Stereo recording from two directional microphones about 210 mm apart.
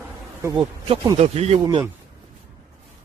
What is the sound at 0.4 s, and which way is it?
Speech, 20° right (ahead or behind).